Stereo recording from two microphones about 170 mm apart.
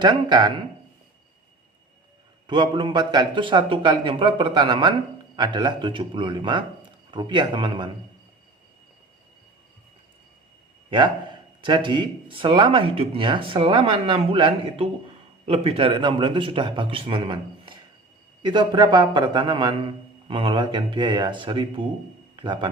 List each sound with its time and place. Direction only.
0.0 s speech: 25° right (ahead or behind)
2.5 s speech: 25° right (ahead or behind)
10.9 s a man's voice: 30° right (ahead or behind)